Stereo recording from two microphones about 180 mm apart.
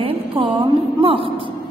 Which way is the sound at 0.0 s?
30° right (ahead or behind).